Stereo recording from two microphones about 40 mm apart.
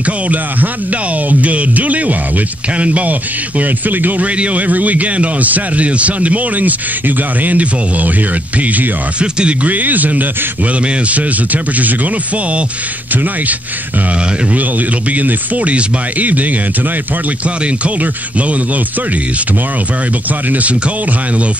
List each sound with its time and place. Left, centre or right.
0.0 s a man's voice: right
4.4 s a man's voice: right
9.2 s speech: right
9.7 s a man's voice: right
13.1 s a man's voice: right
17.6 s a man's voice: right
20.4 s a man's voice: right